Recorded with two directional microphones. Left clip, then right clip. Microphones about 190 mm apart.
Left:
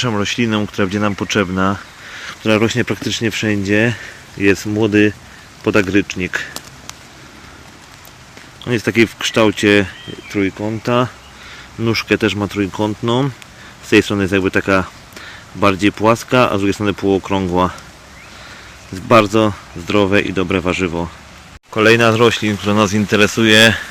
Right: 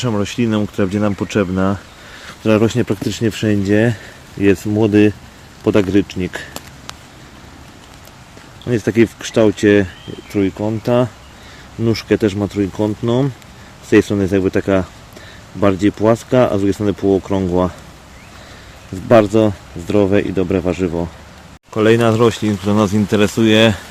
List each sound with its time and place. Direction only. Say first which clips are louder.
0.0 s speech: left 2 dB; 10° right (ahead or behind)
2.2 s speech: even; 15° right (ahead or behind)
8.6 s speech: even; centre (ahead or behind)
19.0 s speech: even; centre (ahead or behind)